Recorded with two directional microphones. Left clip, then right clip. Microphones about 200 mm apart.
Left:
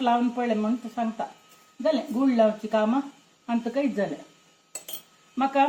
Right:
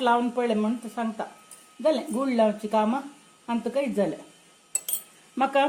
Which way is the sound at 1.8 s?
50° right (ahead or behind).